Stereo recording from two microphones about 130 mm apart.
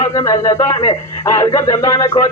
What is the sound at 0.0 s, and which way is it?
A man's voice, 30° left (ahead or behind).